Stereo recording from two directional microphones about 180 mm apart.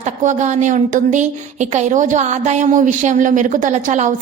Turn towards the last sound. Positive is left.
turn(degrees=-45)  # may be behind; listen again after turning